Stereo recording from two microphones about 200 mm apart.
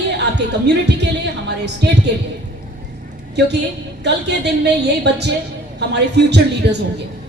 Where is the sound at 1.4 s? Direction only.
55° right (ahead or behind).